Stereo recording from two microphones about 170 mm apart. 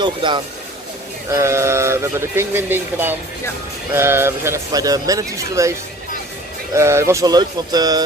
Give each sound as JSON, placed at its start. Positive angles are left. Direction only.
{"t": 0.0, "sound": "speech", "side_deg": -30}
{"t": 1.3, "sound": "speech", "side_deg": -15}